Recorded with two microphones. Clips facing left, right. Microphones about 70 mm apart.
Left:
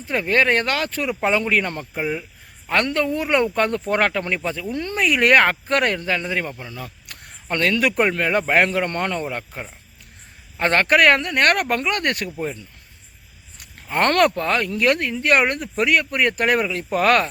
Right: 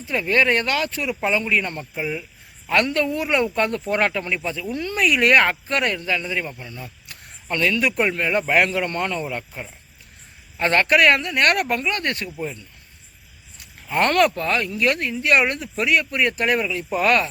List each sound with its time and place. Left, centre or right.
0.1 s speech: left
1.3 s speech: left
2.0 s speech: left
6.5 s speech: centre
6.7 s a sound: left
7.5 s speech: left
8.0 s speech: left
8.9 s speech: left
9.2 s speech: left
10.6 s speech: left
11.7 s speech: left
13.9 s speech: left